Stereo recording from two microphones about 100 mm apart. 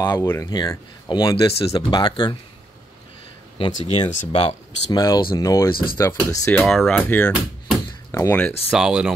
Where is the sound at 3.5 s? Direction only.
60° left (ahead or behind).